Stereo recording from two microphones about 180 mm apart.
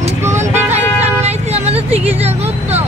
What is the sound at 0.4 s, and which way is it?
Vehicle, 40° right (ahead or behind).